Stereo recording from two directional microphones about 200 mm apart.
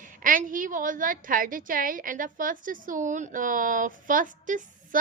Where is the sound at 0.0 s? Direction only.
40° right (ahead or behind).